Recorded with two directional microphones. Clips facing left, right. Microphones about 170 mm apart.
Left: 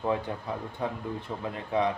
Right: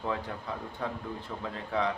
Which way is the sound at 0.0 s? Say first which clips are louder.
Left 5 dB; 20° left (ahead or behind).